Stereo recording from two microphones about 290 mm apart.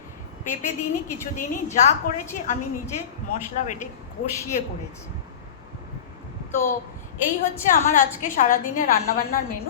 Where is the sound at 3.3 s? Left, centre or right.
Left.